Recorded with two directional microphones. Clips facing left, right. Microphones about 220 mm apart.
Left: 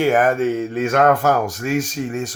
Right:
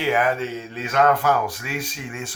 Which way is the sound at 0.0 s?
45° left (ahead or behind).